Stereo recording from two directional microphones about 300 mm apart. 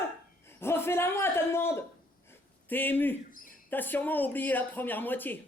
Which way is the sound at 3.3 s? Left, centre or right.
Left.